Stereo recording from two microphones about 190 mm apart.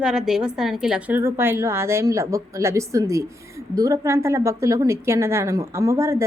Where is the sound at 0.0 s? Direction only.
5° right (ahead or behind).